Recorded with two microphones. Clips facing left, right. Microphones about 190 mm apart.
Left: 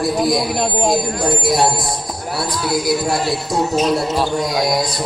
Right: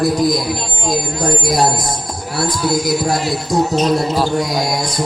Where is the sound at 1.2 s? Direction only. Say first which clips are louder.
Even; 40° right (ahead or behind).